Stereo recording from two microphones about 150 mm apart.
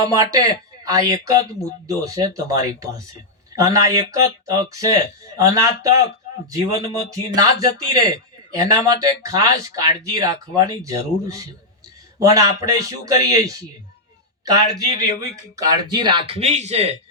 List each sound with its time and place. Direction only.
0.0 s speech: 25° right (ahead or behind)
3.5 s speech: 25° right (ahead or behind); by 17.0 s 45° right (ahead or behind)